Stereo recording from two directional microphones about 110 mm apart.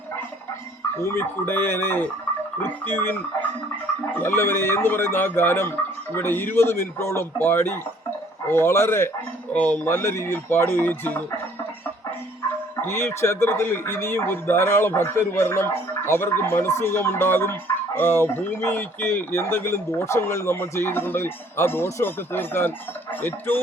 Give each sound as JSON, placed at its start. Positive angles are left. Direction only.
{"t": 1.0, "sound": "speech", "side_deg": 20}
{"t": 9.5, "sound": "speech", "side_deg": 15}
{"t": 12.8, "sound": "speech", "side_deg": 25}